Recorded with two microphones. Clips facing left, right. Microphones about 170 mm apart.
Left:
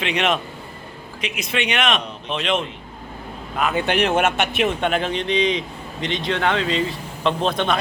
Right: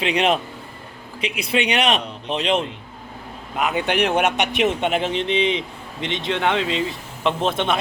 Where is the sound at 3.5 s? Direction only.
15° right (ahead or behind).